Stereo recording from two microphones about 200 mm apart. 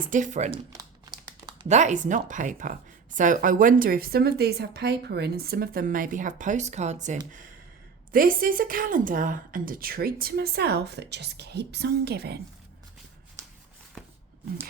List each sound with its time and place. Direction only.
0.0 s speech: 40° right (ahead or behind)
0.7 s crumpling: 20° right (ahead or behind)
1.6 s a woman's voice: 35° right (ahead or behind); by 12.4 s 55° right (ahead or behind)